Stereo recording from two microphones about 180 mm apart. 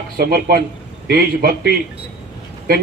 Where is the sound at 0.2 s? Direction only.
55° right (ahead or behind).